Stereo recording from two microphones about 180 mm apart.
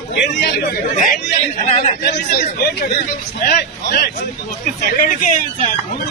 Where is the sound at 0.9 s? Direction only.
40° left (ahead or behind).